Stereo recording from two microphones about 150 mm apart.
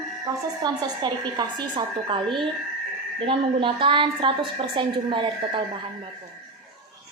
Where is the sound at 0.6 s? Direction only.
25° right (ahead or behind).